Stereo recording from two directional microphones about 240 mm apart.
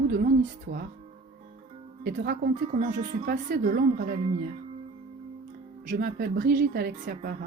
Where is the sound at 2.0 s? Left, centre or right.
Right.